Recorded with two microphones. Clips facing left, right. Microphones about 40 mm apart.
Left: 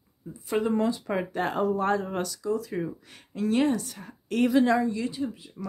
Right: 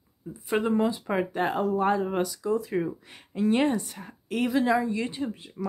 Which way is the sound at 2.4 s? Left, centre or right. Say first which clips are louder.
Right 2 dB; right.